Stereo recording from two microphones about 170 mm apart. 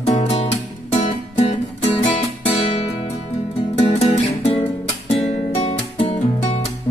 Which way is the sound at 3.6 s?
35° left (ahead or behind).